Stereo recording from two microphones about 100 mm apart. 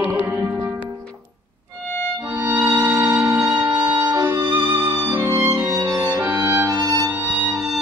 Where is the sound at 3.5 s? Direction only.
15° right (ahead or behind).